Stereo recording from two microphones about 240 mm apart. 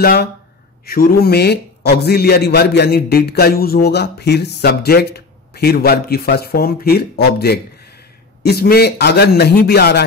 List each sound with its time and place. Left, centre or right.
0.0 s a man's voice: left